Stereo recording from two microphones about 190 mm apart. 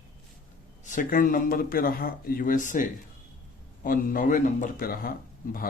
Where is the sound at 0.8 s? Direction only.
45° left (ahead or behind).